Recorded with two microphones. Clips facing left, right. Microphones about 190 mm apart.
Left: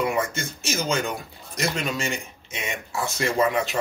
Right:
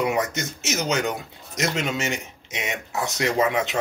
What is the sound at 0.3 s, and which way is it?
A man's voice, 20° right (ahead or behind).